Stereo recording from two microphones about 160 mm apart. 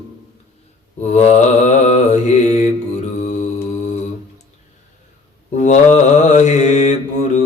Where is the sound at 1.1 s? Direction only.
45° left (ahead or behind).